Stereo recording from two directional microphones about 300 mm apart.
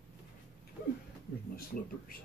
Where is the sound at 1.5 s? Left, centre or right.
Left.